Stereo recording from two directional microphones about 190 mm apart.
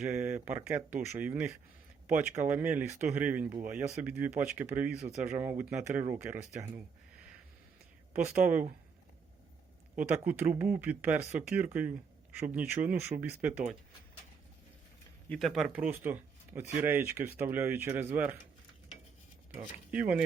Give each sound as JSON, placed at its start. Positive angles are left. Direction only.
{"t": 0.3, "sound": "speech", "side_deg": -10}
{"t": 8.1, "sound": "speech", "side_deg": -10}
{"t": 10.0, "sound": "speech", "side_deg": -10}
{"t": 15.3, "sound": "speech", "side_deg": 0}
{"t": 19.9, "sound": "speech", "side_deg": -5}